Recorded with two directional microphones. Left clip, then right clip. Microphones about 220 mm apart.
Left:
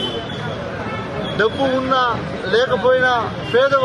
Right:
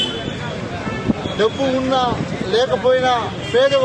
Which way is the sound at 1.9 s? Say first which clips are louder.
Left 1 dB; 5° left (ahead or behind).